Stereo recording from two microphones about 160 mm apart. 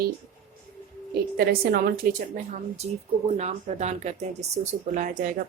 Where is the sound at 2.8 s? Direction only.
45° right (ahead or behind).